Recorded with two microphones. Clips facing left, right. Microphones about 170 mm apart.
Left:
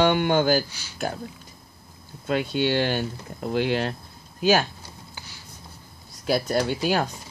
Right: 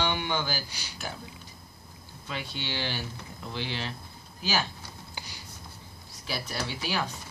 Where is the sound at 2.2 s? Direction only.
50° left (ahead or behind).